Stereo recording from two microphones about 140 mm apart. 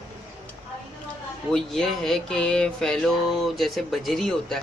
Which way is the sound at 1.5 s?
Centre (ahead or behind).